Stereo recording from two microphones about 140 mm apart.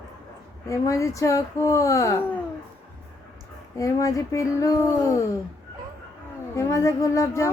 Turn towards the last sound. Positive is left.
turn(degrees=20)  # may be behind; listen again after turning